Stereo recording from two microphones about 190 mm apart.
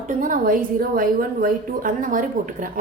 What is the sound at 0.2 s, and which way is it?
A woman's voice, 45° right (ahead or behind).